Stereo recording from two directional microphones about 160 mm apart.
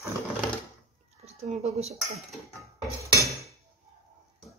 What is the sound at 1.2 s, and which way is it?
Speech, 40° right (ahead or behind).